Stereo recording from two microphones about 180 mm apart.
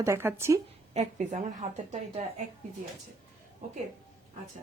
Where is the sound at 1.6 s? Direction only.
35° right (ahead or behind).